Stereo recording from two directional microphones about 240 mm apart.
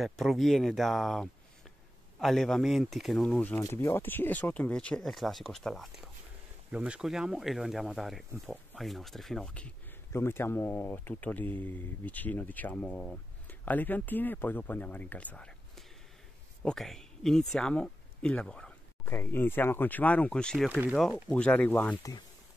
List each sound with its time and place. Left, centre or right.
0.0 s speech: centre